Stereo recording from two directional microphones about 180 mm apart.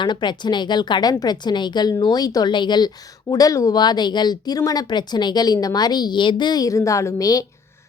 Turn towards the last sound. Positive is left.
turn(degrees=20)  # may be behind; listen again after turning